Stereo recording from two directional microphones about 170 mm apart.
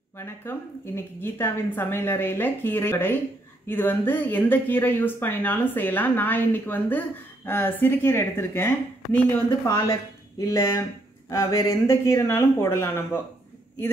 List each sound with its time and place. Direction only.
0.2 s speech: 15° left (ahead or behind)